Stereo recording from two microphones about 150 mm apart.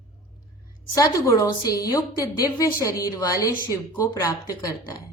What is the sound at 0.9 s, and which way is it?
A woman's voice, 20° left (ahead or behind).